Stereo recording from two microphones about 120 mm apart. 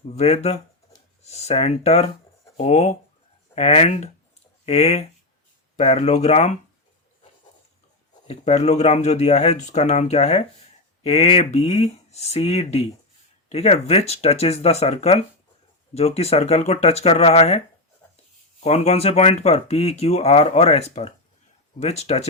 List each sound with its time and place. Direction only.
0.2 s speech: 60° left (ahead or behind)
8.3 s speech: 60° left (ahead or behind)
18.6 s speech: 65° left (ahead or behind)